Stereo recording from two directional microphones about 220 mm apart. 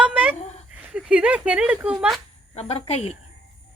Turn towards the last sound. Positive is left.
turn(degrees=25)  # may be behind; listen again after turning